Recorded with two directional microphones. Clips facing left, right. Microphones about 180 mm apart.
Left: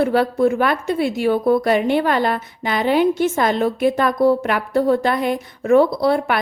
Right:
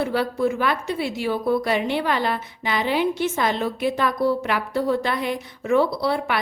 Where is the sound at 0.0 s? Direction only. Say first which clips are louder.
Left 6 dB; 55° left (ahead or behind).